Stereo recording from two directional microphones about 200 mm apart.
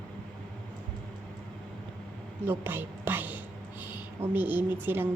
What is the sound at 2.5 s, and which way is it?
A woman's voice, 10° right (ahead or behind).